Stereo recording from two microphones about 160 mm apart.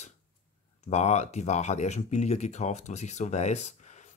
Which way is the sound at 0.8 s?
45° left (ahead or behind).